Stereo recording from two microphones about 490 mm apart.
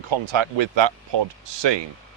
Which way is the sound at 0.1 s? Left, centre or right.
Right.